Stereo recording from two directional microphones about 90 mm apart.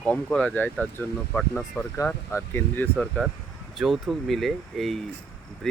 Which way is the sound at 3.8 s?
Centre (ahead or behind).